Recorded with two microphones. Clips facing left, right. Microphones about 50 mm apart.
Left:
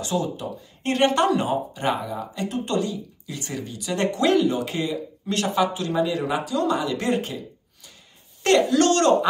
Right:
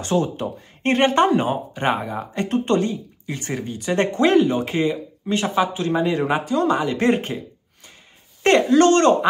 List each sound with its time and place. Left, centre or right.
0.0 s speech: right